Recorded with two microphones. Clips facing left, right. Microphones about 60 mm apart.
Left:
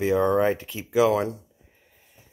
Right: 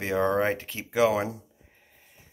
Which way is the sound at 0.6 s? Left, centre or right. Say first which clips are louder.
Left 2 dB; right.